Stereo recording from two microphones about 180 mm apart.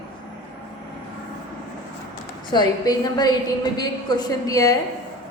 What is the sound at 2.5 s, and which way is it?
A woman's voice, 25° left (ahead or behind).